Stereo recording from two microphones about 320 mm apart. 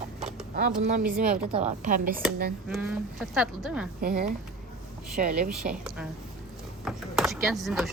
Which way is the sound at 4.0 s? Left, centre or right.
Right.